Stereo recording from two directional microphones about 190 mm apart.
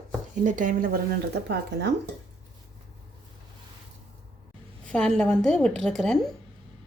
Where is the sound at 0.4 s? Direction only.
45° right (ahead or behind).